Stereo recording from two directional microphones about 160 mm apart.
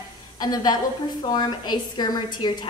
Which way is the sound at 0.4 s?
25° left (ahead or behind).